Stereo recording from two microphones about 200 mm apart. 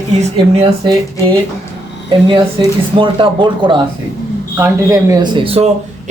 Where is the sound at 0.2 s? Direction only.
30° right (ahead or behind).